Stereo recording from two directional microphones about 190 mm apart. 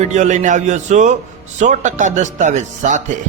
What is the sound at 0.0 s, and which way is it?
A man's voice, 40° right (ahead or behind).